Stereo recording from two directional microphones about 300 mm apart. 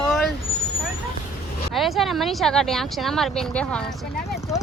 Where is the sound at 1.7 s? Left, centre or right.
Centre.